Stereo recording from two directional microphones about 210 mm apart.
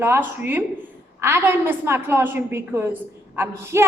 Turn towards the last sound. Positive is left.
turn(degrees=-10)  # may be behind; listen again after turning